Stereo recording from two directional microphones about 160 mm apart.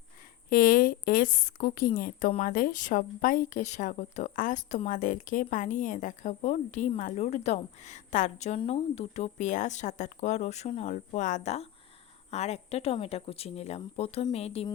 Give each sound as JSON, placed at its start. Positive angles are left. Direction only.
{"t": 0.5, "sound": "a woman's voice", "side_deg": 65}